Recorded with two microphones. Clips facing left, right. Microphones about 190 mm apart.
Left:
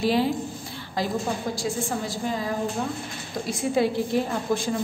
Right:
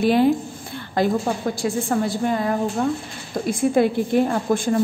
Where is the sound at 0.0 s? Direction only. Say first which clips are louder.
Right 6 dB; 55° right (ahead or behind).